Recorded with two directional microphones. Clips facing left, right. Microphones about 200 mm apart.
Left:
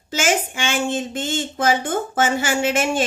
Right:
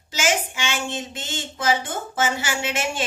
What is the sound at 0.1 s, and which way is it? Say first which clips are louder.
A woman's voice: left 3 dB; 50° left (ahead or behind).